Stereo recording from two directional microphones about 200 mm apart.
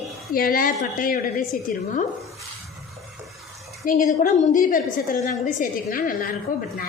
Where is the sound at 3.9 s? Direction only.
40° left (ahead or behind).